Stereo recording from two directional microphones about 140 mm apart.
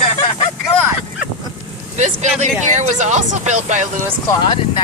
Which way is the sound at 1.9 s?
55° right (ahead or behind).